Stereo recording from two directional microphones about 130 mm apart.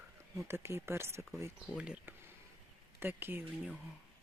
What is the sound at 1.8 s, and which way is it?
Speech, 5° right (ahead or behind).